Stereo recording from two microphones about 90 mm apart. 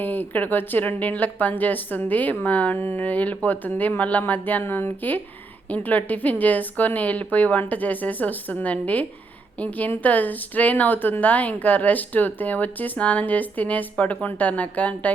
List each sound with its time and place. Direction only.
0.0 s speech: 20° left (ahead or behind)